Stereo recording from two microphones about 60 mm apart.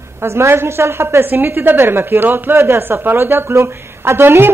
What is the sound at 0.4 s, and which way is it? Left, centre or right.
A woman's voice, right.